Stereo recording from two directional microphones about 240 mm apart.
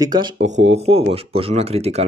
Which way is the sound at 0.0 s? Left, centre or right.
Centre.